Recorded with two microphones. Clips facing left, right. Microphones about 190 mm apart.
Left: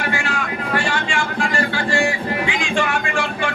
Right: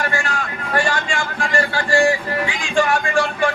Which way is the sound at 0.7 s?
45° right (ahead or behind).